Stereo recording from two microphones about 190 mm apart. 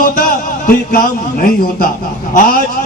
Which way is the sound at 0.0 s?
50° left (ahead or behind).